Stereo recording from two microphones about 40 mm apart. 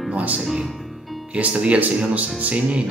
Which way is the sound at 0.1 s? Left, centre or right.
Right.